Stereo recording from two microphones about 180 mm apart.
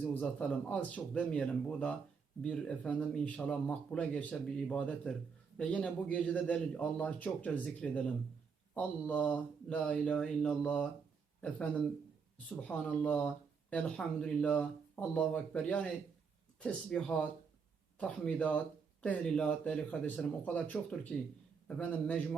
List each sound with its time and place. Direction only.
0.0 s speech: 5° left (ahead or behind)